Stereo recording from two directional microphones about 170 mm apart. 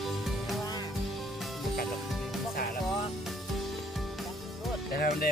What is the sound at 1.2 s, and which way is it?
Music, centre (ahead or behind).